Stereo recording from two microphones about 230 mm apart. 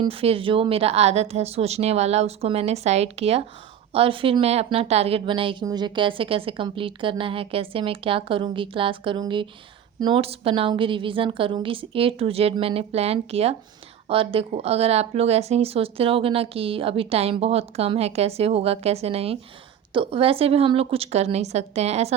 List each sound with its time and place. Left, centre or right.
0.0 s a woman's voice: right